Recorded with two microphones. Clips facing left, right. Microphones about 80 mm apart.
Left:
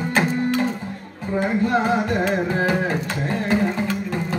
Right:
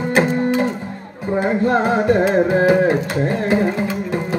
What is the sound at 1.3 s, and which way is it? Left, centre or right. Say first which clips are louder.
Music: right 3 dB; right.